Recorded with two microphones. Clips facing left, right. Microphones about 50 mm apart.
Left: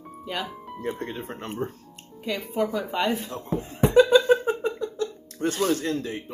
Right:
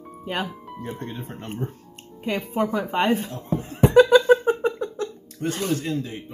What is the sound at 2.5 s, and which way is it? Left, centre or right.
Speech, right.